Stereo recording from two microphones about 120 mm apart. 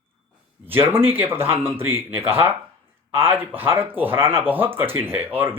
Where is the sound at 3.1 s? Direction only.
20° right (ahead or behind).